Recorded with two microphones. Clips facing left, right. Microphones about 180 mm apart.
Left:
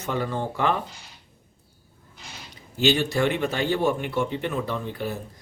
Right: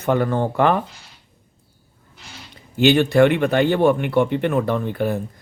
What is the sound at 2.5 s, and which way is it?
Speech, 60° right (ahead or behind).